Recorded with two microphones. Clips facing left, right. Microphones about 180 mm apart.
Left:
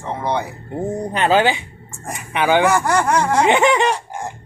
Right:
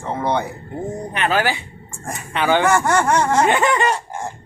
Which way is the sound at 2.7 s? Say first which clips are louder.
Even; centre (ahead or behind).